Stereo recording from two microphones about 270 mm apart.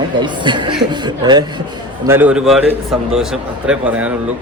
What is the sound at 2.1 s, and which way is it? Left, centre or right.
A man's voice, centre.